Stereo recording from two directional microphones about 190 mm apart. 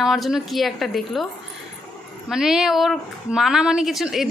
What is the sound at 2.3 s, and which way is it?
A woman's voice, centre (ahead or behind).